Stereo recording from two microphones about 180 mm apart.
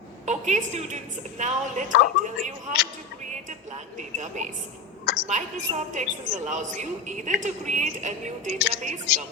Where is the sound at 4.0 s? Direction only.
45° right (ahead or behind).